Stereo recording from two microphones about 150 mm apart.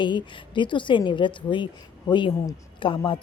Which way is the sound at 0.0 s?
30° left (ahead or behind).